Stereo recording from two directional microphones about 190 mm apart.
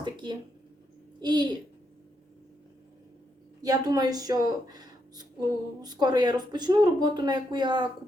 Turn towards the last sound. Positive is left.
turn(degrees=-25)  # may be behind; listen again after turning